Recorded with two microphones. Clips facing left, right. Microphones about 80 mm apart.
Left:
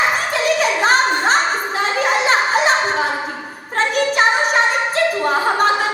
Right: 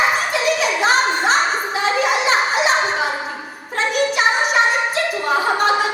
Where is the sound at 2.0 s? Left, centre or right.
Left.